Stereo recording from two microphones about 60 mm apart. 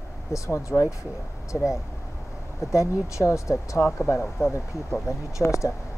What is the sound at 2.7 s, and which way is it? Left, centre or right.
Speech, left.